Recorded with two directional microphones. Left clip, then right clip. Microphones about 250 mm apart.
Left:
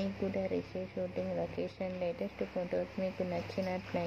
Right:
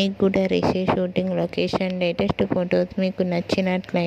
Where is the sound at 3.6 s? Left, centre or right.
Right.